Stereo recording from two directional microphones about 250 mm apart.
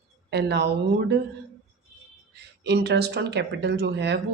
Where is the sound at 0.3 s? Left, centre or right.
Right.